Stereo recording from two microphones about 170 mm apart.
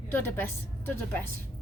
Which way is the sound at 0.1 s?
10° left (ahead or behind).